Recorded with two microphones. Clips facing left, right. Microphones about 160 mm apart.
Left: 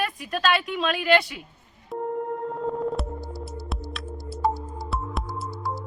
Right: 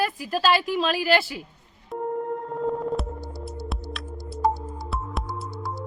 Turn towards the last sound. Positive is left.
turn(degrees=0)  # may be behind; listen again after turning